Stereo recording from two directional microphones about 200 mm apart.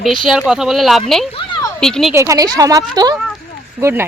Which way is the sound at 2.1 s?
15° right (ahead or behind).